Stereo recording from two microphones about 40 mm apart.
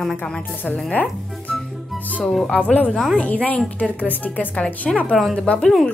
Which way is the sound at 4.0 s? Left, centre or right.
Left.